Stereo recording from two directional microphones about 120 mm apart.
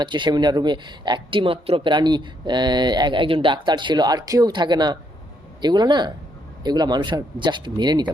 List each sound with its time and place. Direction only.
0.0 s speech: 40° right (ahead or behind)